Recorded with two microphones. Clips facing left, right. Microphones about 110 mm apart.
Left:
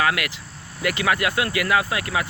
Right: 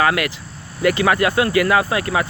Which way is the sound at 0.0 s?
35° right (ahead or behind).